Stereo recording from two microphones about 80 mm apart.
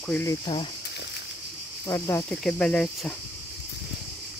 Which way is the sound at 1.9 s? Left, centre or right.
Left.